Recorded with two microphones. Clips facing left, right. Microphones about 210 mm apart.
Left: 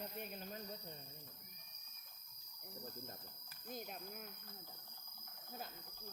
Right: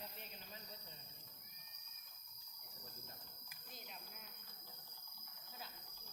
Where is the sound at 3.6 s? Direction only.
50° left (ahead or behind).